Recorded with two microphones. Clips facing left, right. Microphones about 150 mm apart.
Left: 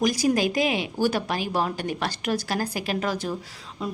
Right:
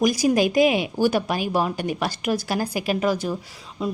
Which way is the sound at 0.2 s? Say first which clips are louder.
Right 4 dB; 15° right (ahead or behind).